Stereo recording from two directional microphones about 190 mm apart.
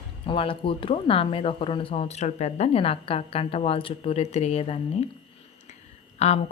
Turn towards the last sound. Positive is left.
turn(degrees=35)  # may be behind; listen again after turning